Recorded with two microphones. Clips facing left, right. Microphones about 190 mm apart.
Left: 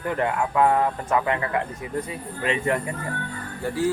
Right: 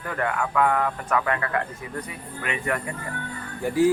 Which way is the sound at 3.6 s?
15° right (ahead or behind).